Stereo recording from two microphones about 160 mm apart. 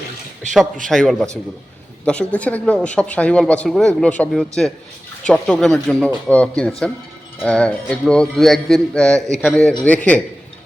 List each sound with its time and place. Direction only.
0.4 s a man's voice: 50° right (ahead or behind)
0.9 s a woman's voice: 5° left (ahead or behind)